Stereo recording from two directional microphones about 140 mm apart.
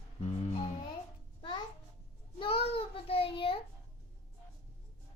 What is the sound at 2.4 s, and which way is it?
A child's voice, 40° left (ahead or behind).